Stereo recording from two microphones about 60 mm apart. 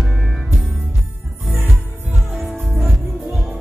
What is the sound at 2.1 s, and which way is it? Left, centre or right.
Music, right.